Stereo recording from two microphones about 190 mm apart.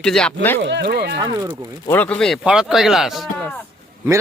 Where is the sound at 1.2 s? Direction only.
20° right (ahead or behind).